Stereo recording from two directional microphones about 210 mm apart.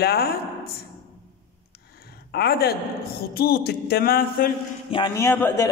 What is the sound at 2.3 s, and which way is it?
A man's voice, 50° left (ahead or behind).